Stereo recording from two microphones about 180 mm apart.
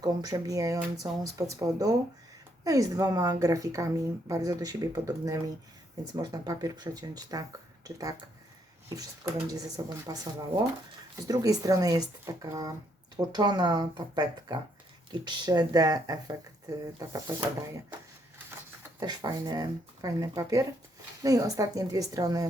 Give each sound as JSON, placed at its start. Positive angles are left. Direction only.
{"t": 0.0, "sound": "a woman's voice", "side_deg": -20}
{"t": 18.9, "sound": "a woman's voice", "side_deg": -20}